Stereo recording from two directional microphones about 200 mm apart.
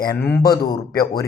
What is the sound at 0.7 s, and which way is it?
Speech, 20° left (ahead or behind).